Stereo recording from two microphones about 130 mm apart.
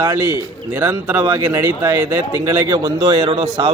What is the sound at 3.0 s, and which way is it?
Speech, 45° right (ahead or behind).